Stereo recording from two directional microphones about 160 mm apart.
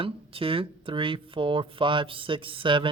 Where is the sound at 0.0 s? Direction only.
35° right (ahead or behind).